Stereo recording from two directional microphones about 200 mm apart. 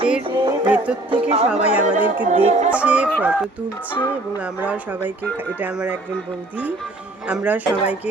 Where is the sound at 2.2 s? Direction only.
35° right (ahead or behind).